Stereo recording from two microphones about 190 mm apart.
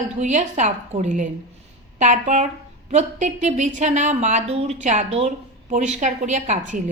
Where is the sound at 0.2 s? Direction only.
40° right (ahead or behind).